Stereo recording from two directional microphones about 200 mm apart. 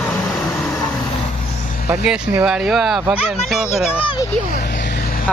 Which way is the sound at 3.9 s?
25° left (ahead or behind).